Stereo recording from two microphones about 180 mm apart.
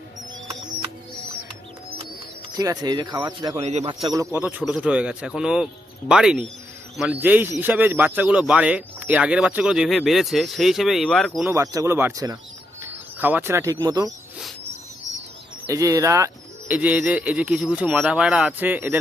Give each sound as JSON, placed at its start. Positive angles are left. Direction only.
{"t": 2.6, "sound": "speech", "side_deg": -20}
{"t": 3.6, "sound": "speech", "side_deg": -40}
{"t": 4.1, "sound": "speech", "side_deg": -20}
{"t": 4.4, "sound": "a man's voice", "side_deg": -5}
{"t": 11.5, "sound": "speech", "side_deg": -20}
{"t": 13.1, "sound": "speech", "side_deg": -10}
{"t": 15.6, "sound": "a man's voice", "side_deg": -20}